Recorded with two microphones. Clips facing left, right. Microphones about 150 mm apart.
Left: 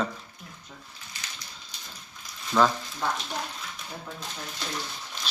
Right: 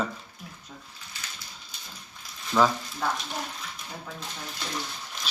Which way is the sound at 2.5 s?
Centre (ahead or behind).